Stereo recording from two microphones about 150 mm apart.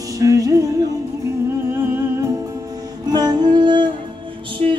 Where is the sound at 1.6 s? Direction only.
15° right (ahead or behind).